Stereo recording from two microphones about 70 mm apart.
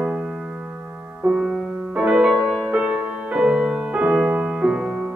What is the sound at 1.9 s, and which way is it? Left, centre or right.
Music, centre.